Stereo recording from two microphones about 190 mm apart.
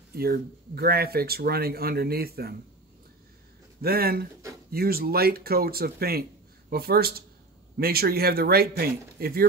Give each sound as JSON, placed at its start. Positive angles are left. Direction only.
{"t": 0.1, "sound": "speech", "side_deg": -55}
{"t": 3.8, "sound": "speech", "side_deg": -55}